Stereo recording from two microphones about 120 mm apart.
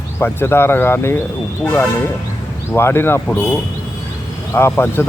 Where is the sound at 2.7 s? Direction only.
20° left (ahead or behind).